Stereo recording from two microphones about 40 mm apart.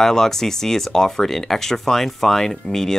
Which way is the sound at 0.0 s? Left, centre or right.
Centre.